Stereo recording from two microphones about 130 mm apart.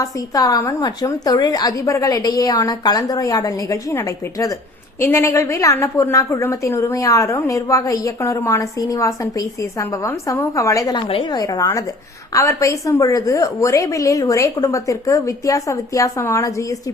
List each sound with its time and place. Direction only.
0.0 s a woman's voice: 25° left (ahead or behind)
11.1 s a woman's voice: 40° left (ahead or behind)
11.3 s a woman's voice: 30° left (ahead or behind)